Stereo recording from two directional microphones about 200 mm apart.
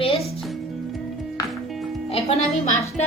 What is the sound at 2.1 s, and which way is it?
Speech, 30° left (ahead or behind).